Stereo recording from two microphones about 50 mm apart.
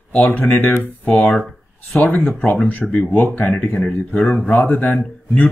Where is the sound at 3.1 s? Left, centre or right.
Left.